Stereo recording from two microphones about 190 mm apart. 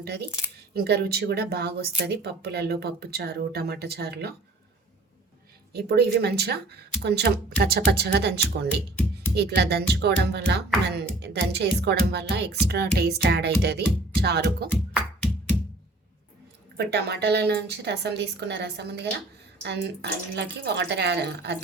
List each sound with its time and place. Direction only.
0.0 s speech: 60° right (ahead or behind)
5.7 s speech: 55° right (ahead or behind)
16.7 s speech: 60° right (ahead or behind)